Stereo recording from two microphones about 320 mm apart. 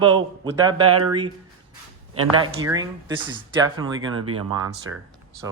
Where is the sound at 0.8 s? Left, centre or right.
Right.